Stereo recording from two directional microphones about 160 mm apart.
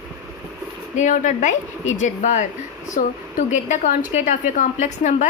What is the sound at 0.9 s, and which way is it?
A woman's voice, 55° left (ahead or behind).